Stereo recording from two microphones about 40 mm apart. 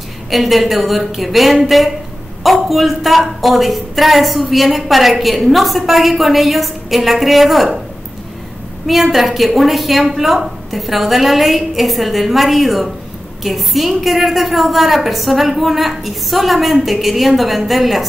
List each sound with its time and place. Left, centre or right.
0.3 s a woman's voice: centre
8.8 s a woman's voice: centre